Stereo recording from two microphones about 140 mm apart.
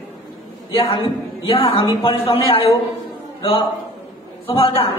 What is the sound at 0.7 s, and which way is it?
A woman's voice, 40° left (ahead or behind).